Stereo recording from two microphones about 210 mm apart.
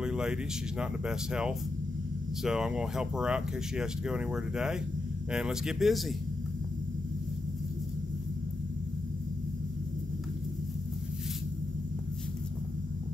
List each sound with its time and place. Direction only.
0.0 s speech: 5° right (ahead or behind)